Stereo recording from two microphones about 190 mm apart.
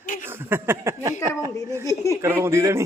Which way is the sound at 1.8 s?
15° left (ahead or behind).